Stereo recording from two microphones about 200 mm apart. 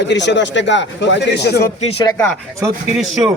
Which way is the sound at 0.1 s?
60° left (ahead or behind).